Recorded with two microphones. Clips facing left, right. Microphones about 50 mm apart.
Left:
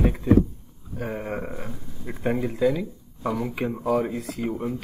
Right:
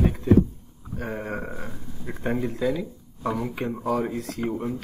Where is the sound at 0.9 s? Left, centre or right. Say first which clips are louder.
Left 1 dB; centre.